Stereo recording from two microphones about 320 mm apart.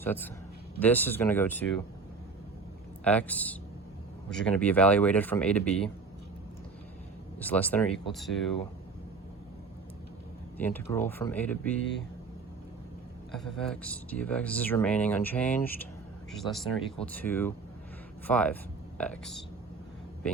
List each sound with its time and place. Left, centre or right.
0.0 s a man's voice: centre
3.0 s speech: centre
7.3 s speech: centre
10.6 s speech: centre
11.8 s speech: left
13.3 s speech: centre